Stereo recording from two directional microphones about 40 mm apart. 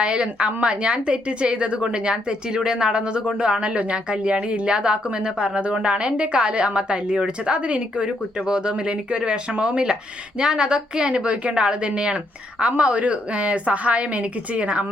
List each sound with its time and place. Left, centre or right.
0.0 s a woman's voice: right